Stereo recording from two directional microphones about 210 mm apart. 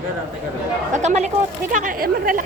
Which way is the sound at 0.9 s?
35° right (ahead or behind).